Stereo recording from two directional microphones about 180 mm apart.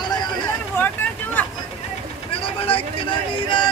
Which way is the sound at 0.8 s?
10° left (ahead or behind).